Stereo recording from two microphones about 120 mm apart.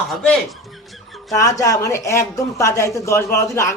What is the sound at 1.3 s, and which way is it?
Speech, 25° left (ahead or behind).